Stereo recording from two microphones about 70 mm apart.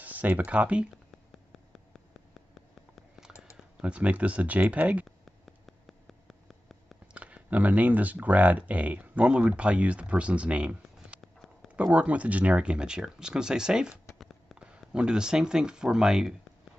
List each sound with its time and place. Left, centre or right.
0.0 s speech: right
3.8 s speech: centre
5.0 s a sound: centre
7.2 s speech: centre
14.1 s a sound: centre
14.6 s speech: centre